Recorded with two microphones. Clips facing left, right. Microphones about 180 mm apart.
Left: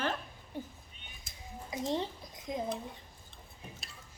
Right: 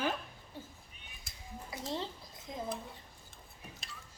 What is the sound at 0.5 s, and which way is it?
Speech, 15° left (ahead or behind).